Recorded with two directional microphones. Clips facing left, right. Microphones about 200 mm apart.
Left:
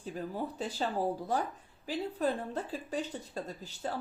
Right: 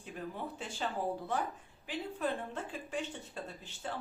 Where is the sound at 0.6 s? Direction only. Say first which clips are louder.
Left 4 dB; 35° left (ahead or behind).